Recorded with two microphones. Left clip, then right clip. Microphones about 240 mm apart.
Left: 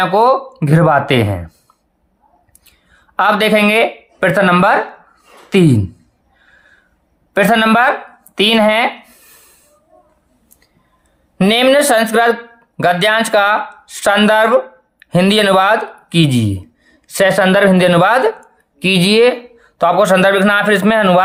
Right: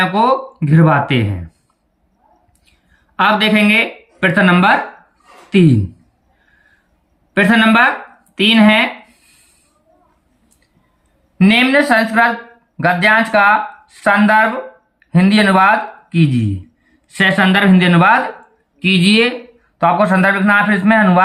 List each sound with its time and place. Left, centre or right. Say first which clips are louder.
0.0 s speech: left 2 dB; left
2.6 s a sound: left 8 dB; left
7.3 s speech: even; left
11.3 s speech: left 2 dB; left
20.1 s a man's voice: left 3 dB; left